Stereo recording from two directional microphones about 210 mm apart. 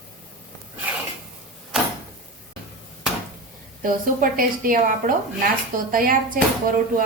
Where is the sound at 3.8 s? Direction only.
40° right (ahead or behind).